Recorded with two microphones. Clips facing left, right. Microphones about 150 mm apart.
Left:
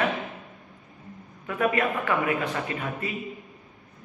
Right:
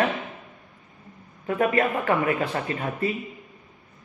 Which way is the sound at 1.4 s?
35° right (ahead or behind).